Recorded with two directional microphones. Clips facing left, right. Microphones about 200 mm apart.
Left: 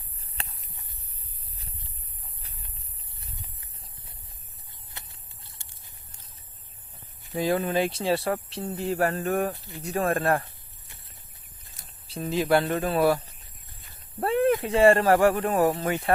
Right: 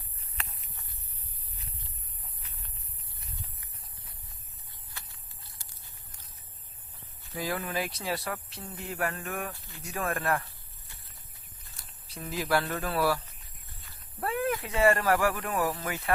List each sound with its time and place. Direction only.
0.4 s walk: 30° left (ahead or behind)
3.2 s a sound: 25° left (ahead or behind)
7.3 s speech: 25° left (ahead or behind)
9.5 s speech: 20° left (ahead or behind)
9.8 s speech: 35° left (ahead or behind)
11.7 s speech: 25° left (ahead or behind)
14.2 s speech: 30° left (ahead or behind)